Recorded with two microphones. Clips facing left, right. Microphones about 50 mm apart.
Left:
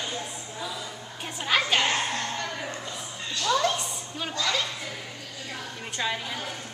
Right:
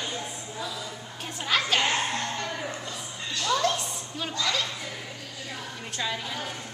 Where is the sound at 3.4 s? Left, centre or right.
Centre.